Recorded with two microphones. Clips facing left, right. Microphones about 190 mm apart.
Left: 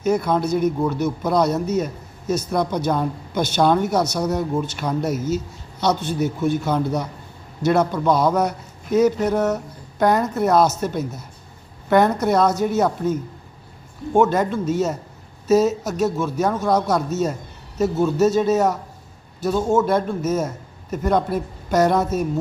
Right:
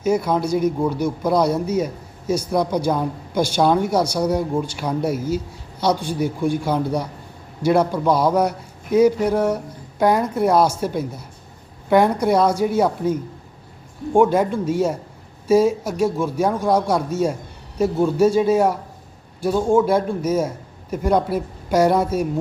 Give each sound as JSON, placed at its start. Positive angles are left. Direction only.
{"t": 0.0, "sound": "a woman's voice", "side_deg": -10}